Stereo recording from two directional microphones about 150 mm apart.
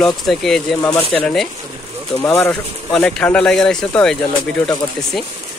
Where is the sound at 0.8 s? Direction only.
20° left (ahead or behind).